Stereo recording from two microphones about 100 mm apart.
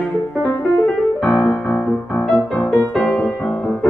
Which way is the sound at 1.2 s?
Centre (ahead or behind).